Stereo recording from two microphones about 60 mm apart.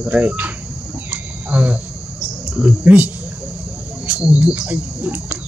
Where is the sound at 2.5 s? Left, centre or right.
Right.